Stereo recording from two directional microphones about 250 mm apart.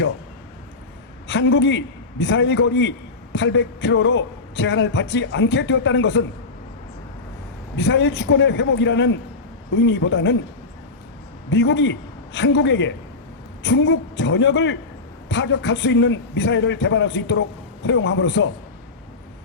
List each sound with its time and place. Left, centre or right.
1.3 s a man's voice: left
7.8 s a man's voice: left
11.5 s a man's voice: left